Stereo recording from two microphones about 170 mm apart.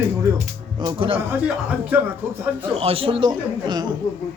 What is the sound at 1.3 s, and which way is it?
Speech, 10° right (ahead or behind).